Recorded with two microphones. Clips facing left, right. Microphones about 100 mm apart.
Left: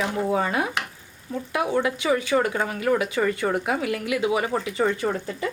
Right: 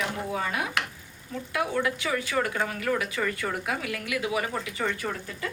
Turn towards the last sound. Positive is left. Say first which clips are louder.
# left 7 dB
turn(degrees=25)  # may be behind; listen again after turning